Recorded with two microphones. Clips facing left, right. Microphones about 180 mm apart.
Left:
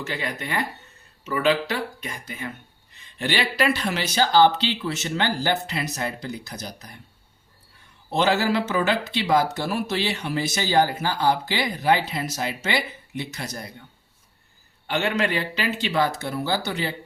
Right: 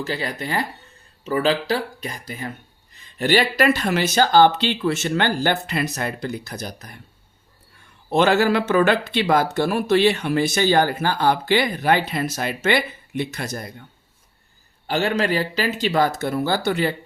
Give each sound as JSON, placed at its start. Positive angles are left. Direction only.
{"t": 0.0, "sound": "speech", "side_deg": -35}
{"t": 8.1, "sound": "speech", "side_deg": -55}
{"t": 14.8, "sound": "speech", "side_deg": -35}